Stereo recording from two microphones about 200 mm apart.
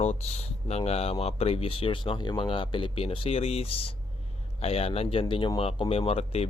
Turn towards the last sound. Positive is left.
turn(degrees=30)  # may be behind; listen again after turning